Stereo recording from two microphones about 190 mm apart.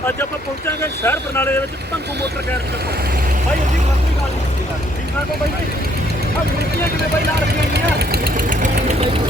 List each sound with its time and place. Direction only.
1.0 s speech: 10° left (ahead or behind)
7.7 s vehicle: 55° right (ahead or behind); by 9.0 s 40° right (ahead or behind)